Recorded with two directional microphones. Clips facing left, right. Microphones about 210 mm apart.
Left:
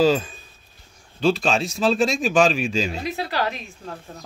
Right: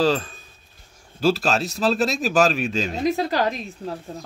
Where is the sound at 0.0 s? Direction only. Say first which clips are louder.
Left 2 dB; 5° left (ahead or behind).